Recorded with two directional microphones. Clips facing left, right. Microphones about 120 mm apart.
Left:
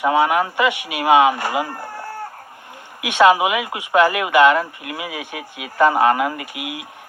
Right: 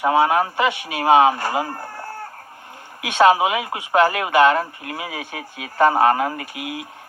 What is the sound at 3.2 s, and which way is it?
Speech, 45° right (ahead or behind).